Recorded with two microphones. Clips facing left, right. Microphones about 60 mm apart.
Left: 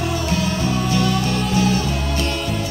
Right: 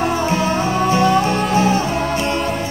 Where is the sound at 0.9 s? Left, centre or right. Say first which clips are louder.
Right 8 dB; right.